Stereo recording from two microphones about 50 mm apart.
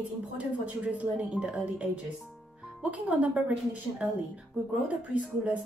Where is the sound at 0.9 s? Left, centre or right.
Right.